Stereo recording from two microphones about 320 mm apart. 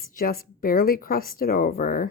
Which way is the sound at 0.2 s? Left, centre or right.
Left.